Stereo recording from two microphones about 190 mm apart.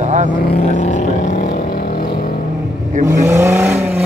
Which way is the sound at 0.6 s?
40° left (ahead or behind).